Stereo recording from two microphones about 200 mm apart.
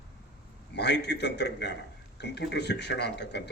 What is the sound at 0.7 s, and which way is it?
A man's voice, 60° left (ahead or behind).